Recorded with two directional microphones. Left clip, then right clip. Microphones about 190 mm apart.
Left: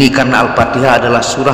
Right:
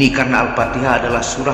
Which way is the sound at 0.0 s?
35° left (ahead or behind).